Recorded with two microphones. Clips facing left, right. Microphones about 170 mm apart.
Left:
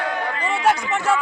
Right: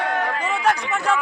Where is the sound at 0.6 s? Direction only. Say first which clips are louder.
Left 2 dB; 5° left (ahead or behind).